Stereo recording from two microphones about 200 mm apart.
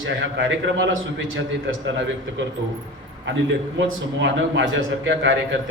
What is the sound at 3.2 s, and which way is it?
A man's voice, 65° right (ahead or behind).